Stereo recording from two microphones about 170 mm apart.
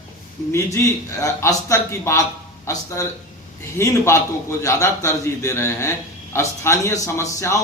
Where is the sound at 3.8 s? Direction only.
15° left (ahead or behind).